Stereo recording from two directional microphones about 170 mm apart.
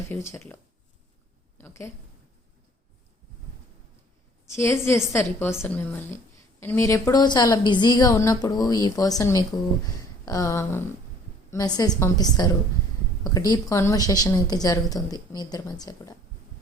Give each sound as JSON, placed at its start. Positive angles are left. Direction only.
{"t": 0.1, "sound": "a woman's voice", "side_deg": 15}
{"t": 1.5, "sound": "a woman's voice", "side_deg": 15}
{"t": 4.5, "sound": "a woman's voice", "side_deg": 15}